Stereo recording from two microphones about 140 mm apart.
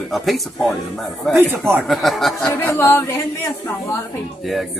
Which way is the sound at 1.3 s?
15° right (ahead or behind).